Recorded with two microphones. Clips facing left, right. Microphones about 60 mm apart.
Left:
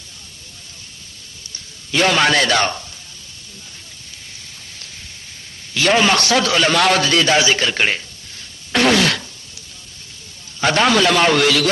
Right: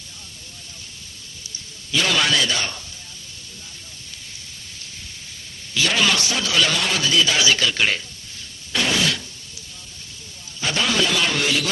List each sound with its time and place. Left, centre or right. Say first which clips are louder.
1.9 s a man's voice: left 5 dB; left
5.7 s a man's voice: left 7 dB; left
6.1 s a man's voice: left 8 dB; left
6.5 s speech: left 4 dB; left
6.7 s a man's voice: left 6 dB; left
7.3 s speech: left 3 dB; left
8.7 s fart: left 7 dB; left
10.6 s a man's voice: left 7 dB; left